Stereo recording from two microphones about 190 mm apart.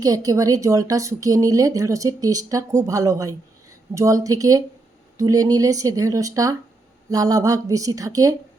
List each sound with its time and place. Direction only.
0.0 s speech: 20° right (ahead or behind)